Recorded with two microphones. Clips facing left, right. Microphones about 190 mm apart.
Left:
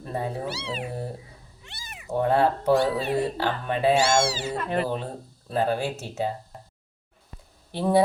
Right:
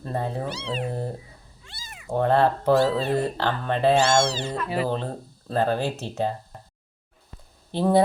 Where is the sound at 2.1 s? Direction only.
10° left (ahead or behind).